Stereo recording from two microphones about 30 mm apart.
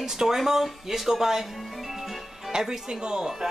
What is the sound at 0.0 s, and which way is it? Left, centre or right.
Speech, centre.